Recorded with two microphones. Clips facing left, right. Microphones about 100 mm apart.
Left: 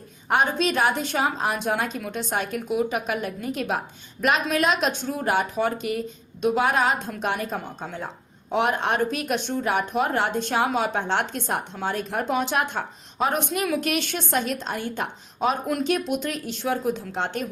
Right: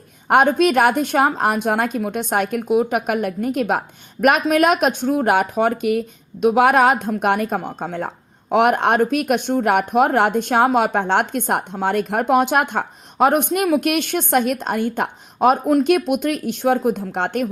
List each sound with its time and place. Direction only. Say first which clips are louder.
0.3 s speech: right 8 dB; 55° right (ahead or behind)